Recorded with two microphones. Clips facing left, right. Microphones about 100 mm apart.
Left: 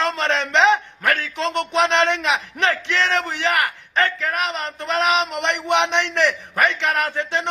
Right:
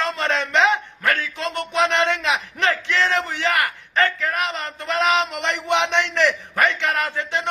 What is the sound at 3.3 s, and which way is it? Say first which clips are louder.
A man's voice: left 1 dB; 20° left (ahead or behind).